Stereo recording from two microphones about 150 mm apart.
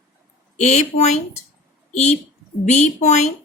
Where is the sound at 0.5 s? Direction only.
50° left (ahead or behind).